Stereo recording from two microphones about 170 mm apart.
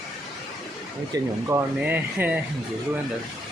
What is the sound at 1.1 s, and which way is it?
Speech, 15° right (ahead or behind).